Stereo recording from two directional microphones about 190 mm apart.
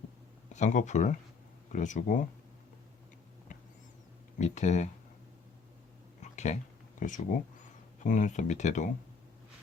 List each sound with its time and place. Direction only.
0.5 s speech: 40° left (ahead or behind)
4.4 s speech: 40° left (ahead or behind)
6.3 s a sound: 35° left (ahead or behind)
7.0 s speech: 40° left (ahead or behind)